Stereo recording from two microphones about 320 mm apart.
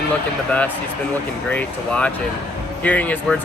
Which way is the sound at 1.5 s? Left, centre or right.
Centre.